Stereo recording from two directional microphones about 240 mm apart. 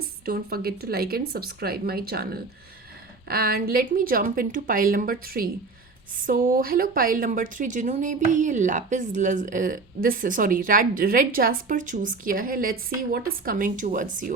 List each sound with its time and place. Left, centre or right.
0.0 s a woman's voice: right